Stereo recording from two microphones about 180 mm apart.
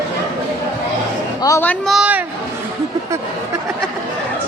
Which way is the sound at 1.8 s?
5° right (ahead or behind).